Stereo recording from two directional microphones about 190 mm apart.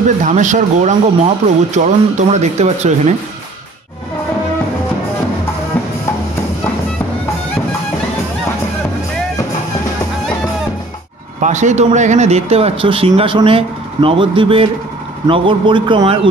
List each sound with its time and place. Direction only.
0.2 s speech: 40° right (ahead or behind)
11.4 s a man's voice: 40° right (ahead or behind)